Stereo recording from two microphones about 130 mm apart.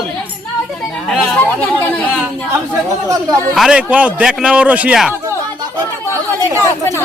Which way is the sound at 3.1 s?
30° right (ahead or behind).